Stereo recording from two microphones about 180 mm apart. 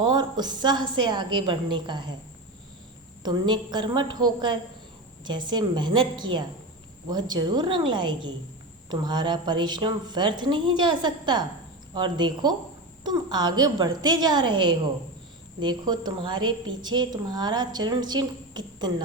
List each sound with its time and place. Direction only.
0.0 s a woman's voice: 25° right (ahead or behind)
3.2 s a woman's voice: 25° right (ahead or behind)